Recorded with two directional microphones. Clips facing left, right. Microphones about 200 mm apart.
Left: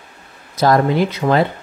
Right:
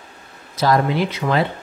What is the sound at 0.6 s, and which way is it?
Speech, 45° left (ahead or behind).